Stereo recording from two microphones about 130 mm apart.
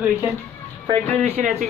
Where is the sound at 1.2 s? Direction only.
60° right (ahead or behind).